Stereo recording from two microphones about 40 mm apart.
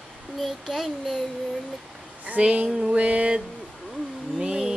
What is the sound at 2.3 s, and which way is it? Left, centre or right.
Speech, right.